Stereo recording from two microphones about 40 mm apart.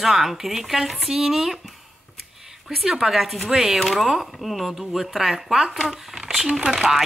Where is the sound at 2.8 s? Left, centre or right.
Centre.